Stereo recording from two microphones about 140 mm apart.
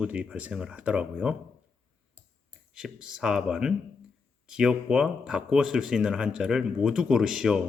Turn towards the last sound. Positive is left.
turn(degrees=-5)  # may be behind; listen again after turning